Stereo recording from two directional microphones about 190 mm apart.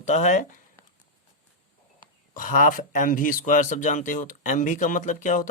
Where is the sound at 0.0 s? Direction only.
40° left (ahead or behind).